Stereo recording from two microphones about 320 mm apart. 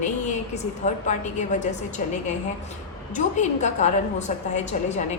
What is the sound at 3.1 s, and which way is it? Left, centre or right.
A woman's voice, left.